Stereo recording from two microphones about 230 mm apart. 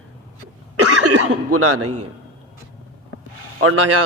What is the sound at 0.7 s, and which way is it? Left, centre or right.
Speech, right.